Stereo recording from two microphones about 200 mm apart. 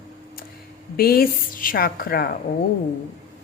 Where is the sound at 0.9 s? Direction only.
50° left (ahead or behind).